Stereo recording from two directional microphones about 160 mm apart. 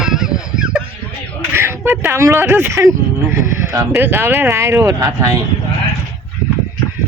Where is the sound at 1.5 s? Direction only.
15° right (ahead or behind).